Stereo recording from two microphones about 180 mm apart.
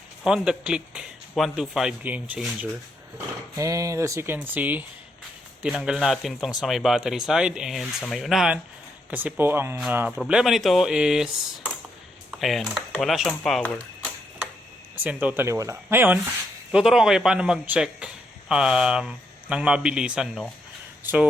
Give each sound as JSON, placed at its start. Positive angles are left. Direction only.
{"t": 0.3, "sound": "a man's voice", "side_deg": -5}
{"t": 14.9, "sound": "a man's voice", "side_deg": -10}